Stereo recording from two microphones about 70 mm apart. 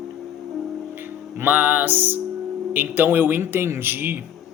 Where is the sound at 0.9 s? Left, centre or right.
Right.